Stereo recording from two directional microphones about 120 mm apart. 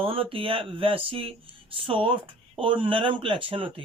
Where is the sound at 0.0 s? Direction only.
50° right (ahead or behind).